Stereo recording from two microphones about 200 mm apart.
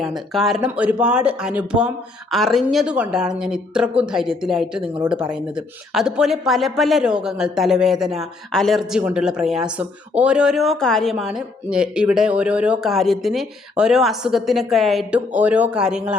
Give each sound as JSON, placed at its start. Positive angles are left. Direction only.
{"t": 0.0, "sound": "speech", "side_deg": 0}